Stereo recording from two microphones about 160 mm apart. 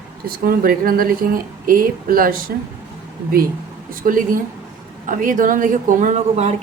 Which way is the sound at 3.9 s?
60° right (ahead or behind).